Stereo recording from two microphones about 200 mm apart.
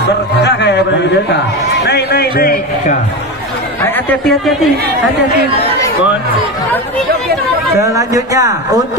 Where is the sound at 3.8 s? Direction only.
5° left (ahead or behind).